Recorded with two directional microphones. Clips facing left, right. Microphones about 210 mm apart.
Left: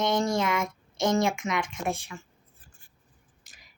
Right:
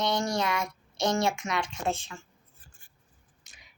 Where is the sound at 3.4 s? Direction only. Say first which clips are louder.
Right 1 dB; centre (ahead or behind).